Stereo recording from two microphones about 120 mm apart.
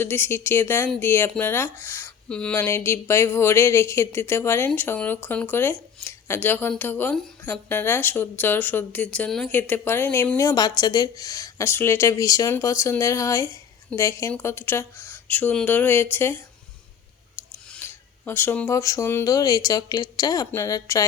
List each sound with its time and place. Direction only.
0.0 s a woman's voice: 20° left (ahead or behind)
2.3 s speech: 10° left (ahead or behind)
2.6 s a woman's voice: 20° left (ahead or behind)
17.4 s scissors: 15° left (ahead or behind)
17.8 s a woman's voice: 20° left (ahead or behind)